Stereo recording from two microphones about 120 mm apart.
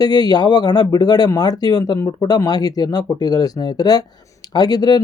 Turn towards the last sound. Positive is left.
turn(degrees=35)  # may be behind; listen again after turning